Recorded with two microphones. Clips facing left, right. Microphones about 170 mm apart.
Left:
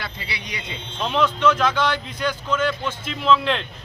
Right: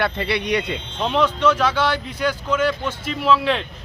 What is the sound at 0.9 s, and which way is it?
Speech, 15° right (ahead or behind).